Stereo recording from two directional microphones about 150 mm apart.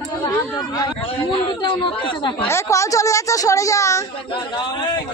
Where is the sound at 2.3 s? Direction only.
15° left (ahead or behind).